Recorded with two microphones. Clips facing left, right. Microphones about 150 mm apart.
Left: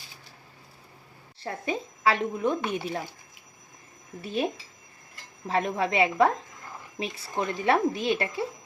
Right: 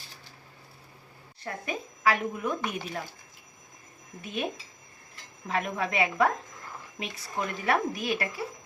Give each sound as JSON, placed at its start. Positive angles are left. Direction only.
{"t": 1.4, "sound": "speech", "side_deg": 30}
{"t": 4.2, "sound": "speech", "side_deg": 35}
{"t": 5.5, "sound": "speech", "side_deg": 30}